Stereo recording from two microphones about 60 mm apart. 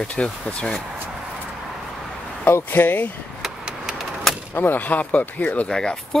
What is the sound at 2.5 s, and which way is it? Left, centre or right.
Speech, left.